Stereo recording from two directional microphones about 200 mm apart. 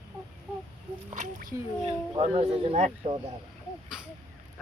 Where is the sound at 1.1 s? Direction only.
35° right (ahead or behind).